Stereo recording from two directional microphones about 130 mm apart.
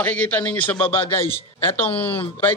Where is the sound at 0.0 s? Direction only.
10° left (ahead or behind).